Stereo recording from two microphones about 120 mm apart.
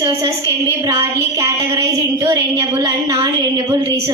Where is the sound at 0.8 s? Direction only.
25° right (ahead or behind).